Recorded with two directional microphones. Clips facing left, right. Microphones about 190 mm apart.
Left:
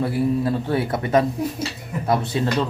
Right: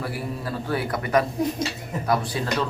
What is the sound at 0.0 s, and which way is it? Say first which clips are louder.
Speech: left 10 dB; 25° left (ahead or behind).